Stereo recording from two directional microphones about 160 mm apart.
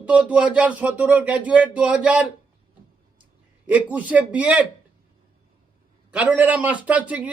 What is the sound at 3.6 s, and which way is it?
A man's voice, 10° right (ahead or behind).